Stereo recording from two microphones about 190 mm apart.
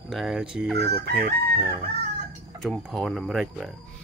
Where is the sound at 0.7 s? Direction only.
60° right (ahead or behind).